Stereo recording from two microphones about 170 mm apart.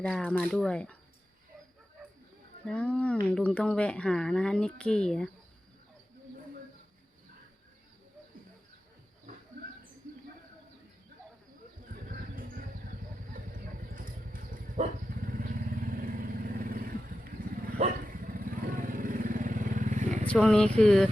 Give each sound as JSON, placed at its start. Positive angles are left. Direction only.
{"t": 0.0, "sound": "speech", "side_deg": 5}
{"t": 2.6, "sound": "speech", "side_deg": 5}
{"t": 12.0, "sound": "a sound", "side_deg": -55}
{"t": 13.3, "sound": "vehicle", "side_deg": -55}
{"t": 20.2, "sound": "speech", "side_deg": 5}